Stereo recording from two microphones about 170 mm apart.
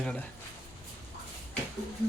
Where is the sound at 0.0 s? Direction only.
5° left (ahead or behind).